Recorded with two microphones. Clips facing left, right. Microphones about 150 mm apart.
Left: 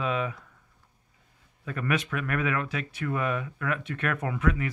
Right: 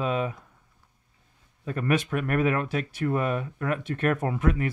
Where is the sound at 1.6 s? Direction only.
35° right (ahead or behind).